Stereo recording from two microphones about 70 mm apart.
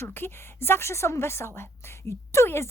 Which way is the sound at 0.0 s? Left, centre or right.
Left.